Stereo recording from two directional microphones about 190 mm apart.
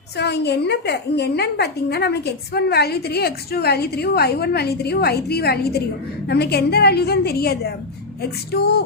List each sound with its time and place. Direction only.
0.2 s a woman's voice: 60° left (ahead or behind)